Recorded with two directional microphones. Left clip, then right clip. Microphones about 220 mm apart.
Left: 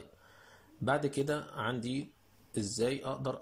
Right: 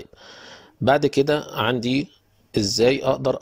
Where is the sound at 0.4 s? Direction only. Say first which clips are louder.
Right 14 dB; 35° right (ahead or behind).